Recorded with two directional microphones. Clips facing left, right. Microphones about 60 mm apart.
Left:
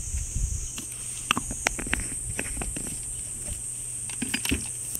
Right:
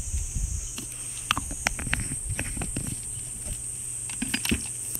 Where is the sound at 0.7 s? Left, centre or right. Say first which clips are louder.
Right 1 dB; centre.